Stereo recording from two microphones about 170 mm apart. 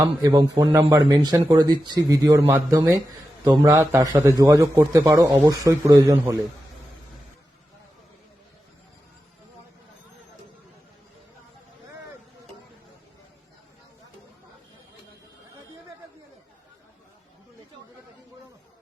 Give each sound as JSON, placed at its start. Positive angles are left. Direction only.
{"t": 0.0, "sound": "a man's voice", "side_deg": -20}